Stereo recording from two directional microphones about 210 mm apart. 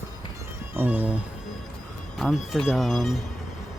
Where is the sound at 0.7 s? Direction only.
10° right (ahead or behind).